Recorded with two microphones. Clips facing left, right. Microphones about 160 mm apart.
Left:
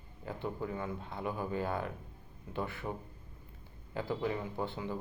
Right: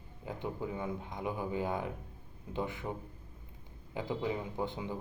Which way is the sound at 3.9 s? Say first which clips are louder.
Even; 15° right (ahead or behind).